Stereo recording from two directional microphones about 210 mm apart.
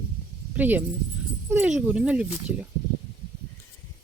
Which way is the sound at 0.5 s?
10° right (ahead or behind).